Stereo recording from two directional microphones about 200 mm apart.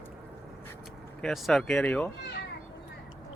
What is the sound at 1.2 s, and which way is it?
Speech, centre (ahead or behind).